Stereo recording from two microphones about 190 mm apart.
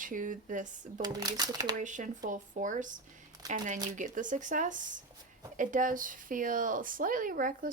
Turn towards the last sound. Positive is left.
turn(degrees=-50)  # may be behind; listen again after turning